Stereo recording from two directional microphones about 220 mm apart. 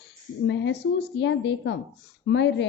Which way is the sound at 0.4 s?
55° left (ahead or behind).